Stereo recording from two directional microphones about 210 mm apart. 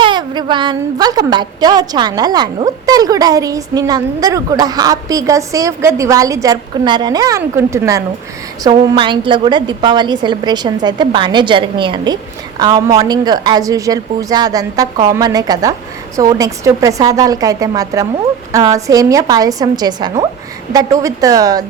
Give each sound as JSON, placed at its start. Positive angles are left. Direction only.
{"t": 0.0, "sound": "a woman's voice", "side_deg": -20}